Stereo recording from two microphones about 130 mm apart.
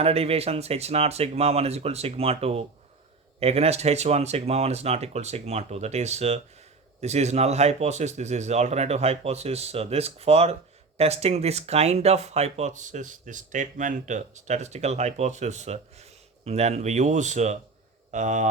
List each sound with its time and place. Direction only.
0.0 s speech: 50° right (ahead or behind); by 18.4 s 65° right (ahead or behind)